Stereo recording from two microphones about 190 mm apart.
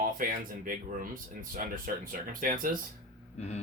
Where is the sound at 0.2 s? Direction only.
45° right (ahead or behind).